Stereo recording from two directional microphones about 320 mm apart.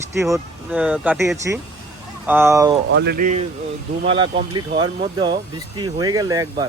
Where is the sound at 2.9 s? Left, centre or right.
Right.